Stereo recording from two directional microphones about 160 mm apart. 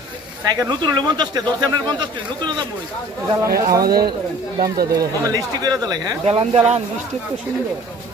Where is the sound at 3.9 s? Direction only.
75° right (ahead or behind).